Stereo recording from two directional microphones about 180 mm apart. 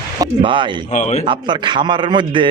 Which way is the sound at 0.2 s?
25° right (ahead or behind).